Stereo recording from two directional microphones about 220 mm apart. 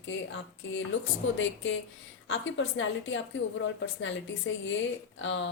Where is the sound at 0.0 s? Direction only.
55° left (ahead or behind).